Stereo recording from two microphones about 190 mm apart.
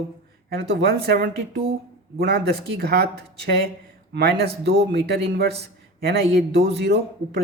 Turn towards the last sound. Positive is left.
turn(degrees=-60)  # may be behind; listen again after turning